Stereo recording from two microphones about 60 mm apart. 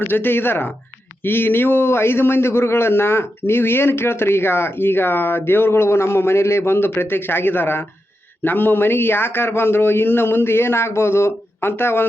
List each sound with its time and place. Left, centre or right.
0.1 s a man's voice: left